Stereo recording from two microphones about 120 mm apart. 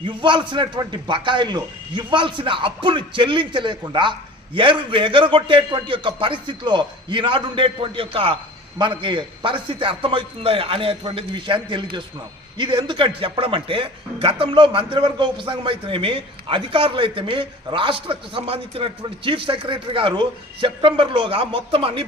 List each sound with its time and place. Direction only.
0.0 s a man's voice: 40° right (ahead or behind)